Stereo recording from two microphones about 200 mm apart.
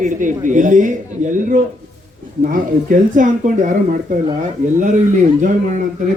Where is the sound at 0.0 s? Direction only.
40° right (ahead or behind).